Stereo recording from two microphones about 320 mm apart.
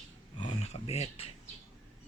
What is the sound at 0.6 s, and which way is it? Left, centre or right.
Speech, centre.